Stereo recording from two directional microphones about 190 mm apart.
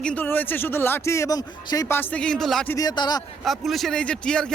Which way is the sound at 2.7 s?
20° left (ahead or behind).